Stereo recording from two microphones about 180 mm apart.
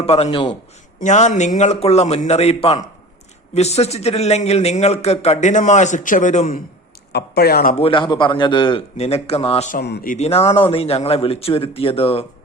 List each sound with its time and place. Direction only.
0.0 s a man's voice: 35° left (ahead or behind)
1.0 s a man's voice: 40° left (ahead or behind)
7.1 s speech: 65° left (ahead or behind)
7.8 s a man's voice: 30° left (ahead or behind)
9.7 s speech: 60° left (ahead or behind)
10.2 s a man's voice: 35° left (ahead or behind)